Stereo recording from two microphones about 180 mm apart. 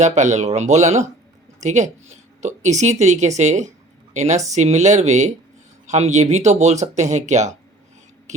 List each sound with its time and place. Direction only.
0.0 s speech: 40° right (ahead or behind)